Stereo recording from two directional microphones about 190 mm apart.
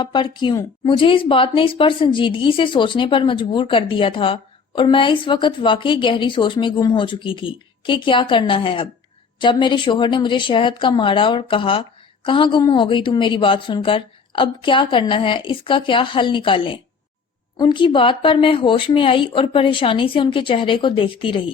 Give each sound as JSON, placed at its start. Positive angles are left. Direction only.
{"t": 0.0, "sound": "speech", "side_deg": 25}